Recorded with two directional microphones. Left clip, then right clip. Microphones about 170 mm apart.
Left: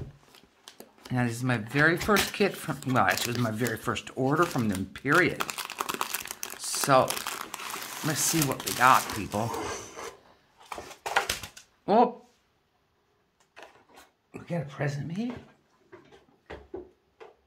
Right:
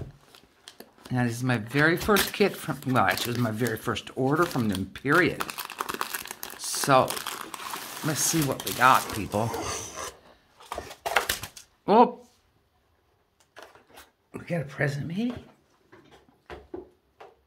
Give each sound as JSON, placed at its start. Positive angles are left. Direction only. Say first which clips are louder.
{"t": 1.1, "sound": "speech", "louder": "right 1 dB", "side_deg": -10}
{"t": 5.4, "sound": "crumpling", "louder": "even", "side_deg": -5}
{"t": 6.6, "sound": "crumpling", "louder": "right 1 dB", "side_deg": -15}
{"t": 7.1, "sound": "crumpling", "louder": "even", "side_deg": 0}
{"t": 8.0, "sound": "speech", "louder": "right 1 dB", "side_deg": -10}
{"t": 9.8, "sound": "filing", "louder": "right 3 dB", "side_deg": -60}
{"t": 11.4, "sound": "a sound", "louder": "right 3 dB", "side_deg": -30}
{"t": 14.3, "sound": "speech", "louder": "right 3 dB", "side_deg": -35}